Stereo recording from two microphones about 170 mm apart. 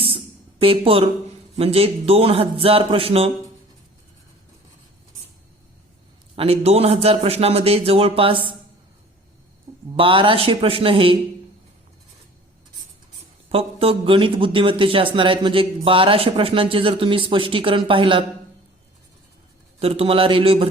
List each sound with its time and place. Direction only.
0.6 s a man's voice: 35° right (ahead or behind)
6.3 s a man's voice: 35° right (ahead or behind)
10.0 s a man's voice: 30° right (ahead or behind)
13.5 s a man's voice: 35° right (ahead or behind)
19.8 s a man's voice: 35° right (ahead or behind)